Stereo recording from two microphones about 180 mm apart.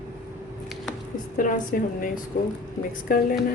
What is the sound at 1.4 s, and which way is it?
Speech, 50° left (ahead or behind).